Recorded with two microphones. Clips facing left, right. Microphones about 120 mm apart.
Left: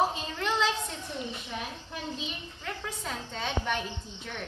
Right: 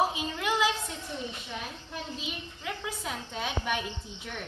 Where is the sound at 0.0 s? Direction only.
10° right (ahead or behind).